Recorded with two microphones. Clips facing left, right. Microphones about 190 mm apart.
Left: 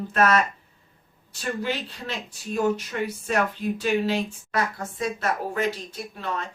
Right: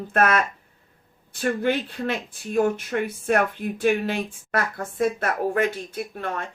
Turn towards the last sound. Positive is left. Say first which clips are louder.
# right 2 dB
turn(degrees=-55)  # may be behind; listen again after turning